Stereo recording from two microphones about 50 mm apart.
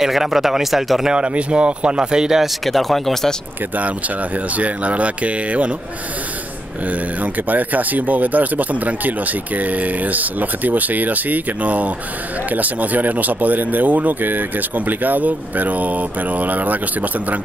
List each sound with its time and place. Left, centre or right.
0.0 s speech: centre
1.1 s speech: right
2.6 s speech: centre
4.6 s speech: right
6.9 s speech: right